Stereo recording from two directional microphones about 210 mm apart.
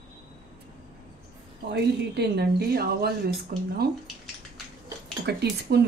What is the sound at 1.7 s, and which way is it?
Speech, 50° right (ahead or behind).